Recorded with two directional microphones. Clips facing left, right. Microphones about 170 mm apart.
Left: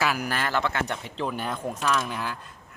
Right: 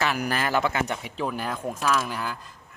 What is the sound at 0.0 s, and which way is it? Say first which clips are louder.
Speech: right 1 dB; 5° left (ahead or behind).